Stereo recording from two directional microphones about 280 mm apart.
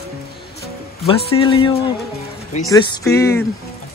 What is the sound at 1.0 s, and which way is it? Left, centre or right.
Speech, centre.